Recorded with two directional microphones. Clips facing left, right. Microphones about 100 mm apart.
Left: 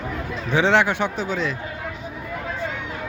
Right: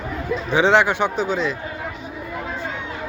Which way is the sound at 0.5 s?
10° right (ahead or behind).